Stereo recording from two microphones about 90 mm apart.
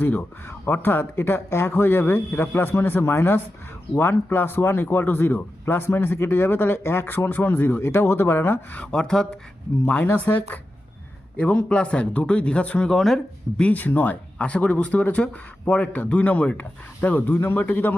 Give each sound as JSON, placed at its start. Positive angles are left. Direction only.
{"t": 0.0, "sound": "speech", "side_deg": 20}
{"t": 9.8, "sound": "speech", "side_deg": 20}
{"t": 13.6, "sound": "speech", "side_deg": 15}